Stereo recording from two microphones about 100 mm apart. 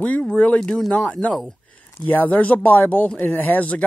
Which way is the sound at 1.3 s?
Centre (ahead or behind).